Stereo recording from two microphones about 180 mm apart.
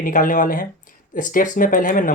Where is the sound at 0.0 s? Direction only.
50° left (ahead or behind).